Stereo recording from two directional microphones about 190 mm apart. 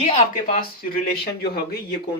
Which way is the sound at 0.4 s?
50° left (ahead or behind).